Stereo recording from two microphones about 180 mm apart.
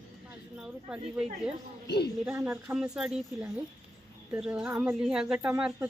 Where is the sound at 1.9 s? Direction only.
65° left (ahead or behind).